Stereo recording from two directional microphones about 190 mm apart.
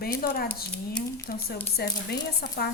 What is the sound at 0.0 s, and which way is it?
A woman's voice, 50° left (ahead or behind).